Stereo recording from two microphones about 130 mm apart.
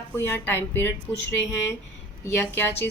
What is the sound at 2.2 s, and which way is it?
Speech, 15° left (ahead or behind).